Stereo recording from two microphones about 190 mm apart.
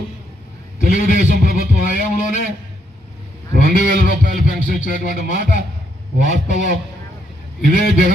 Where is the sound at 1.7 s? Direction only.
45° left (ahead or behind).